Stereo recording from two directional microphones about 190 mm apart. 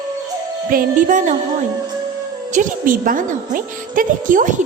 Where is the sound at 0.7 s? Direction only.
40° right (ahead or behind).